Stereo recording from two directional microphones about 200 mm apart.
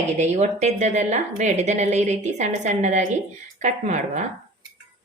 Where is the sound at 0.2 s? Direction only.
35° right (ahead or behind).